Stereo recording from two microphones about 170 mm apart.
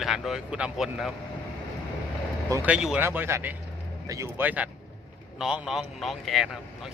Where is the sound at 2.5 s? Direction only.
15° right (ahead or behind).